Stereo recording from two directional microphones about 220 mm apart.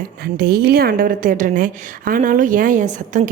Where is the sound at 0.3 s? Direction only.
45° right (ahead or behind).